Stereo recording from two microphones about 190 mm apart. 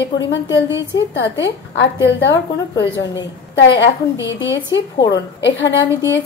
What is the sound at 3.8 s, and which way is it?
A woman's voice, 75° left (ahead or behind).